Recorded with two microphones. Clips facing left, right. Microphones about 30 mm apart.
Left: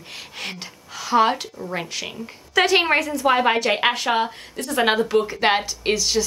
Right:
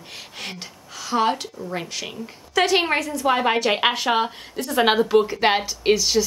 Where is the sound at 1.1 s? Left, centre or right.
Centre.